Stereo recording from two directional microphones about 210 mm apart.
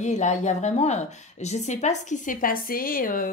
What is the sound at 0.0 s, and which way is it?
A woman's voice, 35° left (ahead or behind).